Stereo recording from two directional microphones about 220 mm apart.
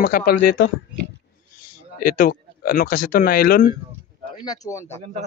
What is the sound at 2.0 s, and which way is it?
Speech, 40° left (ahead or behind).